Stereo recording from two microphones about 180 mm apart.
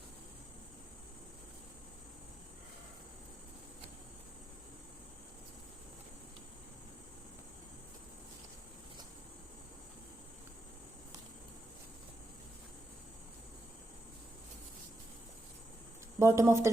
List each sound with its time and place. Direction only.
16.1 s speech: 15° right (ahead or behind)